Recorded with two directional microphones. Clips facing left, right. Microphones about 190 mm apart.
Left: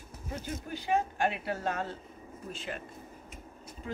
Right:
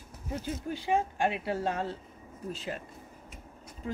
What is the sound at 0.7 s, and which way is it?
Speech, 25° right (ahead or behind).